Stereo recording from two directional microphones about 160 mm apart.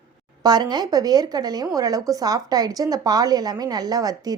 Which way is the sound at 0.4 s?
25° right (ahead or behind).